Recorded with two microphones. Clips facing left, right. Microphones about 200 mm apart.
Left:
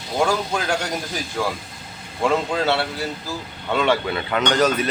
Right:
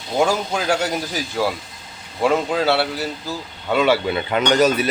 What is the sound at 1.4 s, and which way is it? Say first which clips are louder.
A man's voice: right 3 dB; 5° right (ahead or behind).